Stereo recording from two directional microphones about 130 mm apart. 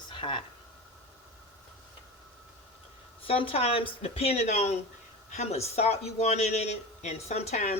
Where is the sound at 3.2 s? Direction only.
45° left (ahead or behind).